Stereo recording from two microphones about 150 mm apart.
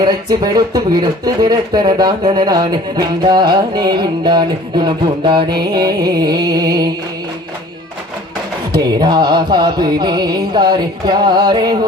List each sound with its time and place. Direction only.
0.0 s music: 25° right (ahead or behind)
8.7 s music: 30° right (ahead or behind)